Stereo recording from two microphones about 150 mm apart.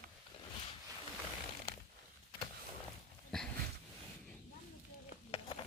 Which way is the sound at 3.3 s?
5° left (ahead or behind).